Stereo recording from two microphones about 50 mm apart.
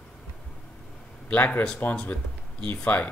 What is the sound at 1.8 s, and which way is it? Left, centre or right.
Speech, left.